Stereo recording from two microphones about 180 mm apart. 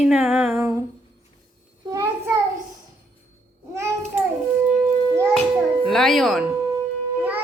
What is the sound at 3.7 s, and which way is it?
Babbling, 15° right (ahead or behind).